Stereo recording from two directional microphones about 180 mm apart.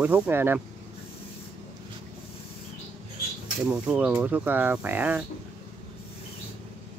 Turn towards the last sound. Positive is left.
turn(degrees=-10)  # may be behind; listen again after turning